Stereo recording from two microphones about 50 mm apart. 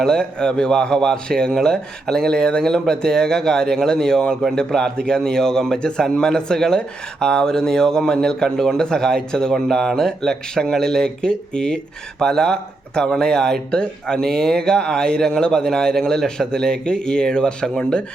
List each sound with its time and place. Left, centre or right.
0.0 s a man's voice: centre